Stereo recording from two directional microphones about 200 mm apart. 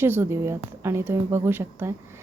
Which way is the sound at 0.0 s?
10° right (ahead or behind).